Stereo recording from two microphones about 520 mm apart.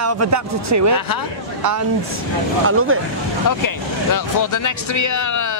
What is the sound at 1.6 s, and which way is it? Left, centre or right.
A man's voice, right.